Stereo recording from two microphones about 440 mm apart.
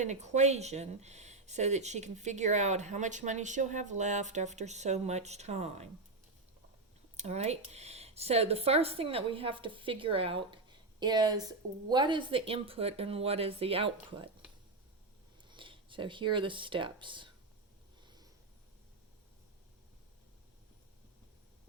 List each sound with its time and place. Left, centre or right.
0.0 s speech: centre
7.2 s speech: centre
15.4 s speech: centre
18.0 s a sound: centre